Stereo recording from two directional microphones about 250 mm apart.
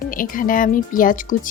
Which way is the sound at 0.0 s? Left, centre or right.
Left.